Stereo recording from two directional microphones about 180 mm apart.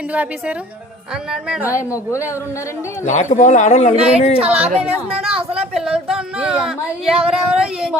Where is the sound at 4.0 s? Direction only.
5° right (ahead or behind).